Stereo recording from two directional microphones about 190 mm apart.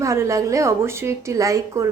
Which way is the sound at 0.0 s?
15° right (ahead or behind).